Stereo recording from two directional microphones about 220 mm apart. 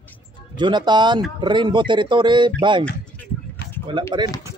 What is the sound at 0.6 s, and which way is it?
Speech, 20° right (ahead or behind).